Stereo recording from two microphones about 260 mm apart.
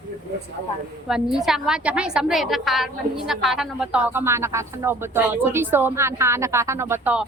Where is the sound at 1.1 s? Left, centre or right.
Centre.